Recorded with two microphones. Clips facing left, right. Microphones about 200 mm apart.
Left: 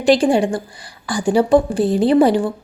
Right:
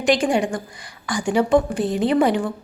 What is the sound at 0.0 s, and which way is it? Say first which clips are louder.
Speech: left 5 dB; 30° left (ahead or behind).